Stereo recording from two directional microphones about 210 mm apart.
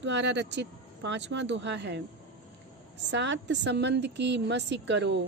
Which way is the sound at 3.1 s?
60° right (ahead or behind).